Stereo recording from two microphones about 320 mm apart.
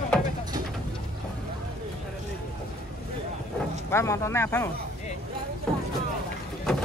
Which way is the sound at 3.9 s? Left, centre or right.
Centre.